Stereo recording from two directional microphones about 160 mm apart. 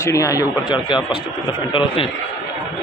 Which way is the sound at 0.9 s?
30° left (ahead or behind).